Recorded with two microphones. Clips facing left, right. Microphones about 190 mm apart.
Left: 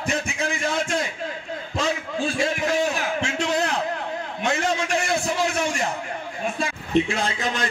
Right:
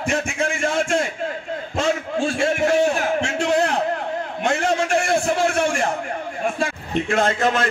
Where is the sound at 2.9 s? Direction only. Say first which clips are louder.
Right 4 dB; 50° right (ahead or behind).